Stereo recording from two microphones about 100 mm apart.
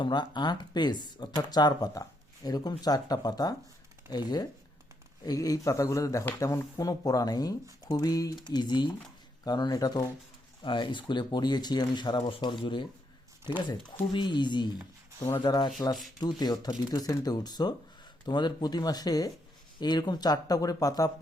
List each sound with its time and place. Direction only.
0.0 s speech: 50° left (ahead or behind)
10.6 s speech: 55° left (ahead or behind)
14.1 s speech: 50° left (ahead or behind)